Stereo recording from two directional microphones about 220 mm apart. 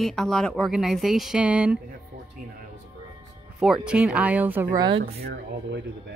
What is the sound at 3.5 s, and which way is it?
Speech, centre (ahead or behind).